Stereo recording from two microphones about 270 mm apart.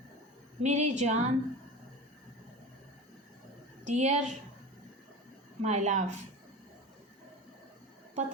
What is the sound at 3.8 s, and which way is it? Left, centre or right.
Speech, right.